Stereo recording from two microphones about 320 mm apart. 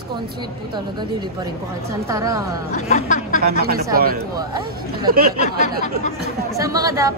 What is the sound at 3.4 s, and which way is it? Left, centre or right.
Speech, right.